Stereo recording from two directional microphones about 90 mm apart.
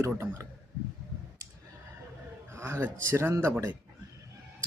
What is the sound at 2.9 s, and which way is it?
Speech, 30° right (ahead or behind).